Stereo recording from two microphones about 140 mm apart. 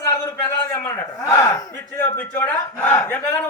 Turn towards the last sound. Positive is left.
turn(degrees=15)  # may be behind; listen again after turning